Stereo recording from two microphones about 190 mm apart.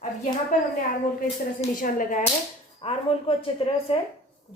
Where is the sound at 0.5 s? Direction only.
45° left (ahead or behind).